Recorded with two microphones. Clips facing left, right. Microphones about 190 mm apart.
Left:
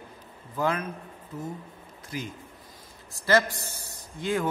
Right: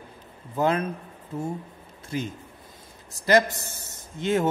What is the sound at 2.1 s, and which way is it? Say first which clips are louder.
A man's voice: right 5 dB; 25° right (ahead or behind).